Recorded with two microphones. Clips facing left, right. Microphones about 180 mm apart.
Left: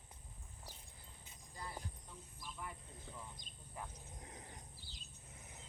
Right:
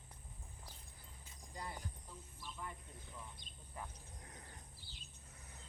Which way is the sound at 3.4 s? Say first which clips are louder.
Even; 45° left (ahead or behind).